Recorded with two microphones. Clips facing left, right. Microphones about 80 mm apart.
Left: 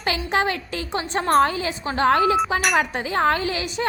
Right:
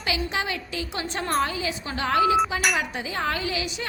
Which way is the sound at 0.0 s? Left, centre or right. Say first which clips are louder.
Left 5 dB; left.